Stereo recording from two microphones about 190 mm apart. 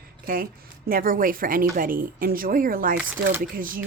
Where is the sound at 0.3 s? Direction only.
45° right (ahead or behind).